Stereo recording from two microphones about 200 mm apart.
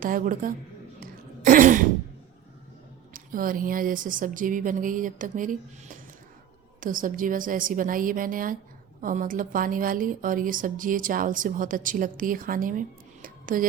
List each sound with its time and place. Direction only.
0.0 s a woman's voice: 40° right (ahead or behind)
1.5 s throat clearing: 40° right (ahead or behind)
3.1 s a woman's voice: 45° right (ahead or behind)
13.2 s a sound: 45° right (ahead or behind)